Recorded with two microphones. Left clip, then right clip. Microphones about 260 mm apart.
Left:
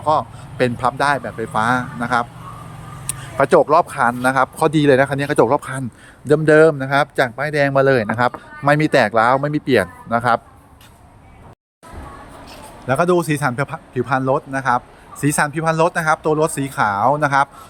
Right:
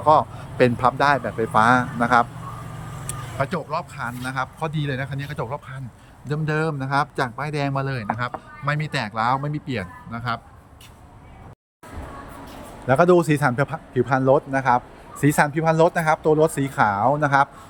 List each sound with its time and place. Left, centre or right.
0.0 s speech: centre
3.1 s vehicle: centre
3.7 s a man's voice: centre
12.9 s speech: centre